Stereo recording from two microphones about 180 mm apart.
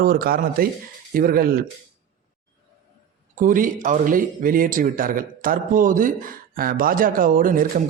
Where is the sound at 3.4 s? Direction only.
45° right (ahead or behind).